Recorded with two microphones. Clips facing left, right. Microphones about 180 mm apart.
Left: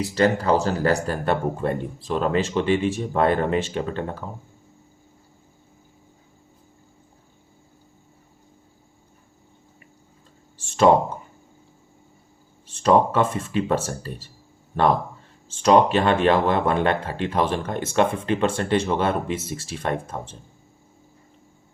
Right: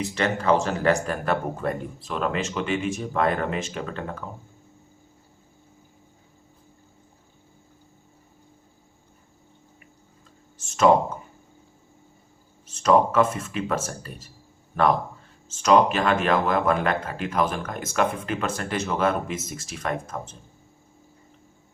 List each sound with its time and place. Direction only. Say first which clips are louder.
0.0 s speech: left 4 dB; 35° left (ahead or behind)
10.6 s a sound: left 4 dB; 30° left (ahead or behind)
12.6 s speech: left 1 dB; 30° left (ahead or behind)